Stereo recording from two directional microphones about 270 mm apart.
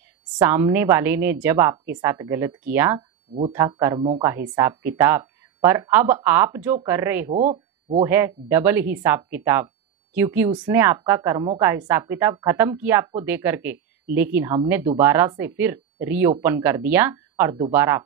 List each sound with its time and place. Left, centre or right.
0.4 s speech: centre
7.3 s speech: right
8.0 s speech: centre